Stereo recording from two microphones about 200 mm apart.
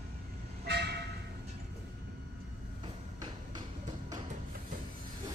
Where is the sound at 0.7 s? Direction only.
55° right (ahead or behind).